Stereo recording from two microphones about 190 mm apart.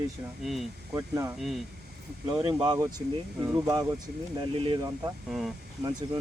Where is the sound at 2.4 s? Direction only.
20° right (ahead or behind).